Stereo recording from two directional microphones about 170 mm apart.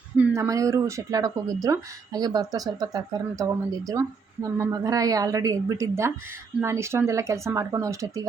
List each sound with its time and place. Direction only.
0.2 s speech: 20° right (ahead or behind)